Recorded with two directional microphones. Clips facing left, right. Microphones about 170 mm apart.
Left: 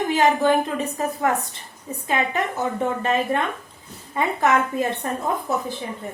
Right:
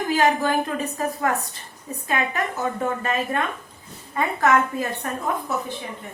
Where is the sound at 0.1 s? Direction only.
20° left (ahead or behind).